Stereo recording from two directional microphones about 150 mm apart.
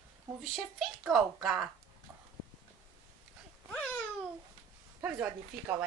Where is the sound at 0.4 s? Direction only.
Centre (ahead or behind).